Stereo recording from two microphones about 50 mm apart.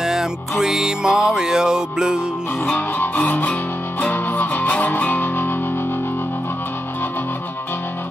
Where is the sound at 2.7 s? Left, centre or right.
Left.